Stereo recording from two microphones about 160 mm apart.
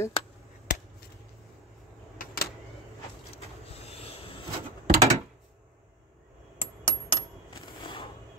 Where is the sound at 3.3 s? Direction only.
40° left (ahead or behind).